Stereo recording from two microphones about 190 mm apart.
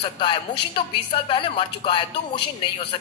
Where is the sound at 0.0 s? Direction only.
25° left (ahead or behind).